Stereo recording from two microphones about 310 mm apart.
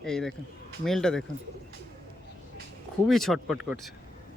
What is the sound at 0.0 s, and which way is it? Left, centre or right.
Speech, centre.